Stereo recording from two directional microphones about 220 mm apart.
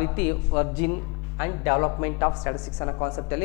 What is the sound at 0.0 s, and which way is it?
A man's voice, 10° left (ahead or behind).